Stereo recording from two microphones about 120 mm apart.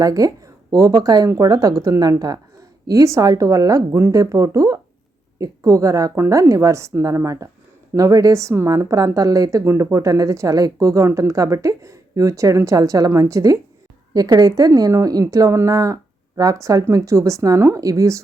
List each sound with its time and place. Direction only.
0.0 s a woman's voice: 30° right (ahead or behind)